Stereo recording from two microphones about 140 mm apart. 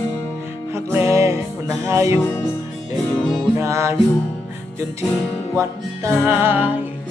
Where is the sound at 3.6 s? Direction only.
20° right (ahead or behind).